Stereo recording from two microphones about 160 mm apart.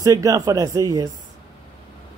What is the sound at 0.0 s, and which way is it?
Speech, 20° right (ahead or behind).